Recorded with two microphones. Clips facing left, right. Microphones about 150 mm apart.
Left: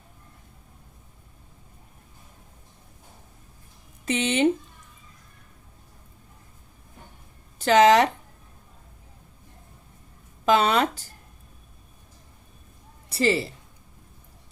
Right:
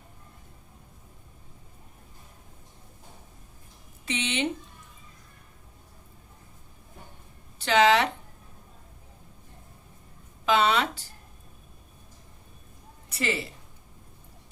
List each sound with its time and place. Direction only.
4.0 s speech: 45° left (ahead or behind)
7.6 s speech: 40° left (ahead or behind)
10.4 s speech: 45° left (ahead or behind)
13.1 s a woman's voice: 35° left (ahead or behind)